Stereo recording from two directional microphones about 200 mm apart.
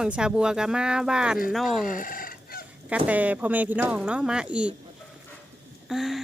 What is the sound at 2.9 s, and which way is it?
Speech, 5° right (ahead or behind).